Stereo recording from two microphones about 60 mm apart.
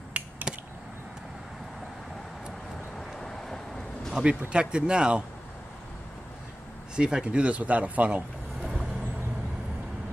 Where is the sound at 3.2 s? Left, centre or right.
Centre.